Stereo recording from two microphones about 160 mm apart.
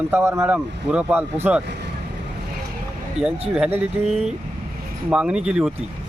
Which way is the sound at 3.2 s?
40° right (ahead or behind).